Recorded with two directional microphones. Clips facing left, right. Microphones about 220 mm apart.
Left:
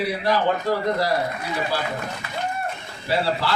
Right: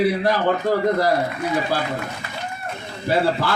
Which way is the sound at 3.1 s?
50° right (ahead or behind).